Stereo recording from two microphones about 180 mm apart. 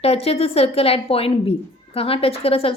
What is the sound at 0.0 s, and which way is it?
A woman's voice, 35° left (ahead or behind).